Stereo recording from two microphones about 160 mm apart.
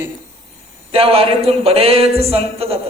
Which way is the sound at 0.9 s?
35° right (ahead or behind).